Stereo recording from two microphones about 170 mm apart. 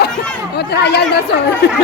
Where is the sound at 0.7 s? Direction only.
75° left (ahead or behind).